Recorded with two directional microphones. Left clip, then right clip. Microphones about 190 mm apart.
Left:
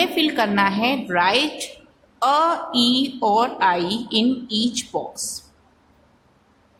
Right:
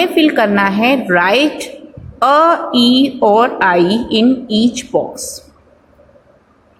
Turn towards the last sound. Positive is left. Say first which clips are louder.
# right 8 dB
turn(degrees=-20)  # may be behind; listen again after turning